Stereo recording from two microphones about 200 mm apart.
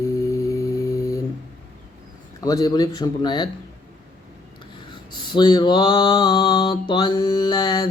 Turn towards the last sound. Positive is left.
turn(degrees=20)  # may be behind; listen again after turning